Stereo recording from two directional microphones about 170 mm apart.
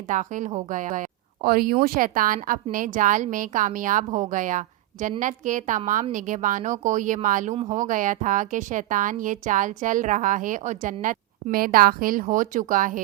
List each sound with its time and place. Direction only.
0.1 s a woman's voice: 50° right (ahead or behind)